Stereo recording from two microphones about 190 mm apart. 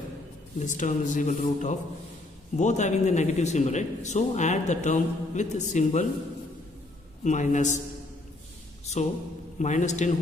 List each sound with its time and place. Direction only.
0.6 s a man's voice: 40° left (ahead or behind)
7.2 s a man's voice: 40° left (ahead or behind)
9.6 s a man's voice: 40° left (ahead or behind)